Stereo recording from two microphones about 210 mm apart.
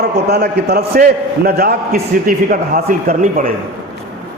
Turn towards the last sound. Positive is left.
turn(degrees=-40)  # may be behind; listen again after turning